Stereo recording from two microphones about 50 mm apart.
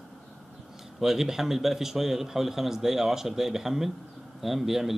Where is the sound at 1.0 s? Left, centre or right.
Centre.